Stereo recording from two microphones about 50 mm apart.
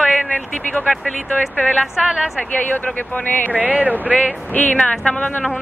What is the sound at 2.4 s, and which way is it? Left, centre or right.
Speech, left.